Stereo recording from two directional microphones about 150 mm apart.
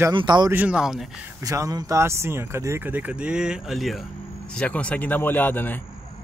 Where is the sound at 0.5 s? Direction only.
10° right (ahead or behind).